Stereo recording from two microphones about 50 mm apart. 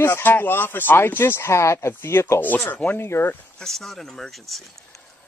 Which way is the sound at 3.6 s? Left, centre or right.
Centre.